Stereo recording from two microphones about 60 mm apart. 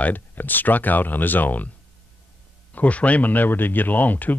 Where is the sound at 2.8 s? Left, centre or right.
Left.